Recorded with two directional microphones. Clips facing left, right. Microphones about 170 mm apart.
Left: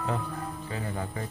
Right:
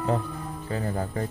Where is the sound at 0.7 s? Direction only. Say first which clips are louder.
Right 7 dB; 40° right (ahead or behind).